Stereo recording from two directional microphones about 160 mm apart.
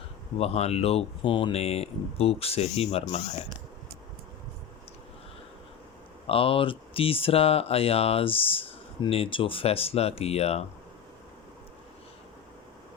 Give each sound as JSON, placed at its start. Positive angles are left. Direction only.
{"t": 0.3, "sound": "speech", "side_deg": 40}
{"t": 6.2, "sound": "speech", "side_deg": 35}